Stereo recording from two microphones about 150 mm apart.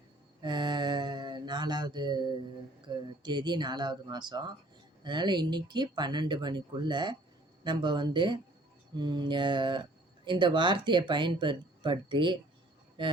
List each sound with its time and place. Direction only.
0.4 s mantra: 30° right (ahead or behind)
2.8 s speech: 30° right (ahead or behind)